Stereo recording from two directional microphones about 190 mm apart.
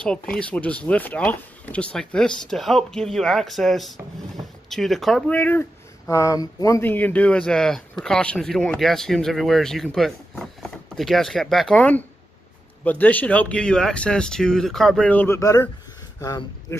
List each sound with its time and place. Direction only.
0.0 s speech: 5° left (ahead or behind)